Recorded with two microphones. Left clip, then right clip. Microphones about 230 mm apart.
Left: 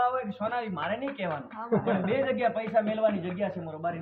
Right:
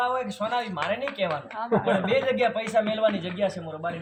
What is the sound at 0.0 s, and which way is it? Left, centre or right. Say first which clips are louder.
Speech: right 2 dB; right.